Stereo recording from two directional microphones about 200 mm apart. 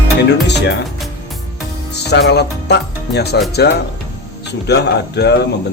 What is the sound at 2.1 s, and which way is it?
Speech, 55° left (ahead or behind).